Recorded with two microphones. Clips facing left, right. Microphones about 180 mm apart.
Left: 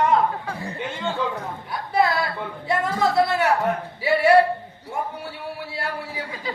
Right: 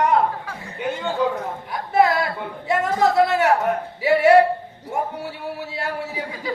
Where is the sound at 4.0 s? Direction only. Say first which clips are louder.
Right 2 dB; 20° right (ahead or behind).